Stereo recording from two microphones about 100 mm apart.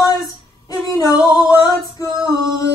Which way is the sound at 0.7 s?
35° left (ahead or behind).